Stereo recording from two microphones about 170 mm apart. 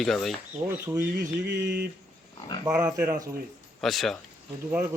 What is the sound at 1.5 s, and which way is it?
Speech, 70° right (ahead or behind).